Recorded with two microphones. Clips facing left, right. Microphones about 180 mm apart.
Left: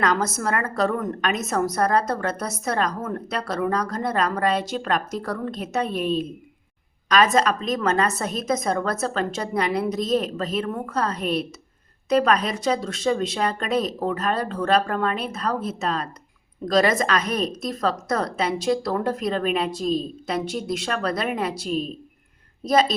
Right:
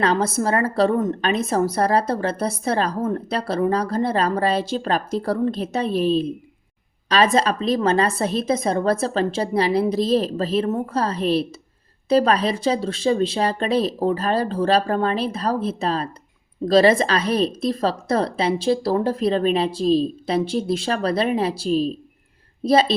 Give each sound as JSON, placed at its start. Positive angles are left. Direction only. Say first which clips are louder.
{"t": 0.0, "sound": "a woman's voice", "louder": "right 3 dB", "side_deg": -30}